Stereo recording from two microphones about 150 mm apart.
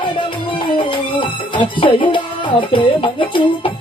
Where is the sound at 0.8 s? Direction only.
35° left (ahead or behind).